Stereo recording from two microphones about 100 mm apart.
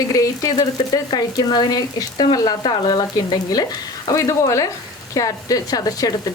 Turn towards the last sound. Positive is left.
turn(degrees=40)  # may be behind; listen again after turning